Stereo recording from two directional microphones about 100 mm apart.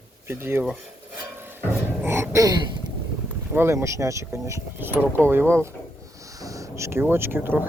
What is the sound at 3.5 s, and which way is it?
Speech, 25° right (ahead or behind).